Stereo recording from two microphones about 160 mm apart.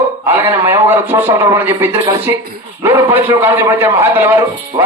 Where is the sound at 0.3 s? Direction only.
15° right (ahead or behind).